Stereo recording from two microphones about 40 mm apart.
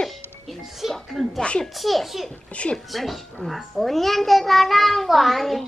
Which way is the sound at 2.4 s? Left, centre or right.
Left.